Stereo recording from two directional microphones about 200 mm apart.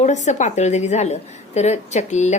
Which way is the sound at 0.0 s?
35° left (ahead or behind).